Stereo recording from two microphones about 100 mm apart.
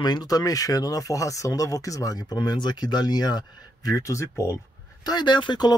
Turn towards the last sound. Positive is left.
turn(degrees=50)  # may be behind; listen again after turning